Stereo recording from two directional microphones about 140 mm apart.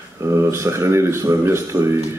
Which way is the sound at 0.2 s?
20° right (ahead or behind).